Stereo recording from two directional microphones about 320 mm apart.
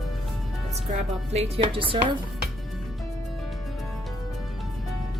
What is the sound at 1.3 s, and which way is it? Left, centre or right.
Speech, centre.